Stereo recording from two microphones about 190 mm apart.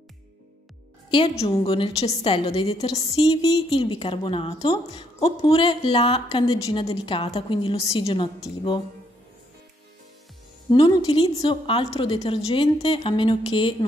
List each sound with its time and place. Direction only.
1.1 s a woman's voice: 30° left (ahead or behind)
3.0 s a woman's voice: 20° left (ahead or behind)
3.7 s a woman's voice: 30° left (ahead or behind)
10.7 s a woman's voice: 30° left (ahead or behind)